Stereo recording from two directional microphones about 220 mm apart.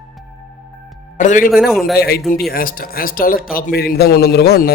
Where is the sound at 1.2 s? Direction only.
35° left (ahead or behind).